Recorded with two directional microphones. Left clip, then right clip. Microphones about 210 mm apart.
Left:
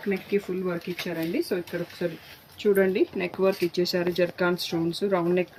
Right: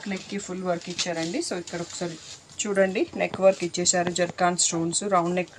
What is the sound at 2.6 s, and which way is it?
Speech, 45° right (ahead or behind).